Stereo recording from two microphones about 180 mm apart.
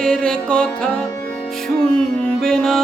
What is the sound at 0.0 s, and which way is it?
Music, 5° left (ahead or behind).